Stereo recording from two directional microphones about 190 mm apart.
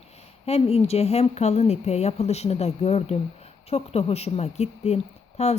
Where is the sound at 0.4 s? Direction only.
35° left (ahead or behind).